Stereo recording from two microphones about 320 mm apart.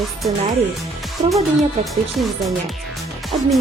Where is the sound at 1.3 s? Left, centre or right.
Centre.